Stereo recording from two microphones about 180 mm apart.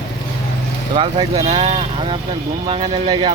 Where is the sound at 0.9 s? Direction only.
30° right (ahead or behind).